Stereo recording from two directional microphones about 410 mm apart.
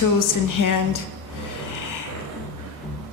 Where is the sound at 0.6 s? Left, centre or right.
Left.